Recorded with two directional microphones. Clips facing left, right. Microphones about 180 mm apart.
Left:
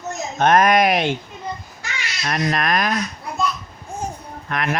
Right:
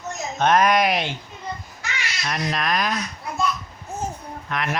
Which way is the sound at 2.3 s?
50° left (ahead or behind).